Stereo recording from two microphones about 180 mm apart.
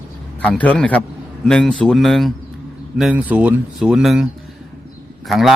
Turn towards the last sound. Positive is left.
turn(degrees=0)  # may be behind; listen again after turning